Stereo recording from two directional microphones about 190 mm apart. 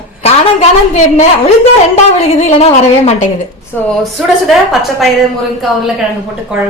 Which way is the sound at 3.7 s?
5° left (ahead or behind).